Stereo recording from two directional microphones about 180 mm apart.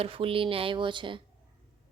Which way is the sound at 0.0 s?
30° right (ahead or behind).